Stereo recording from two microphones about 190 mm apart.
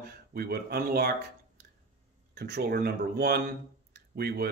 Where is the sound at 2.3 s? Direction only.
60° right (ahead or behind).